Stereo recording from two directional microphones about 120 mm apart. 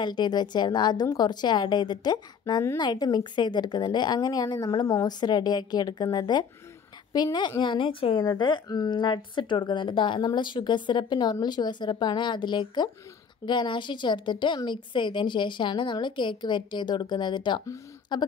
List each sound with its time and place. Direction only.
0.0 s a woman's voice: 40° left (ahead or behind)
8.2 s a woman's voice: 35° left (ahead or behind)